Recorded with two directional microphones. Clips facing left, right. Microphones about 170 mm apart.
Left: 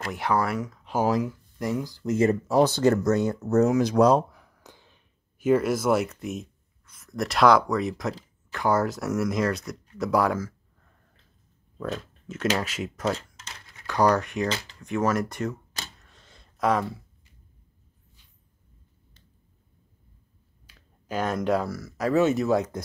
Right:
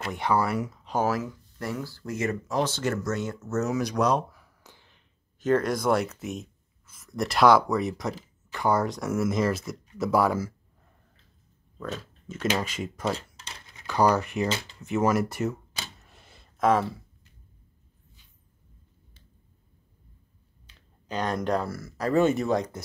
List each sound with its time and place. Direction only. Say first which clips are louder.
0.0 s speech: even; centre (ahead or behind)
0.9 s speech: left 2 dB; 15° left (ahead or behind)
2.1 s speech: left 7 dB; 30° left (ahead or behind)
4.3 s a sound: left 3 dB; 15° left (ahead or behind); by 6.4 s centre (ahead or behind)
6.9 s speech: even; centre (ahead or behind)
11.8 s speech: left 3 dB; centre (ahead or behind)
16.0 s a sound: right 1 dB; 10° right (ahead or behind)
20.6 s speech: left 3 dB; 5° left (ahead or behind)